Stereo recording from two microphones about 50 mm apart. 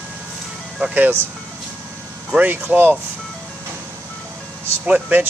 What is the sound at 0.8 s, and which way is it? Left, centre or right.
Speech, right.